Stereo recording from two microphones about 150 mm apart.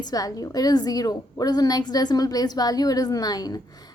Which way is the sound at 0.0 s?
25° left (ahead or behind).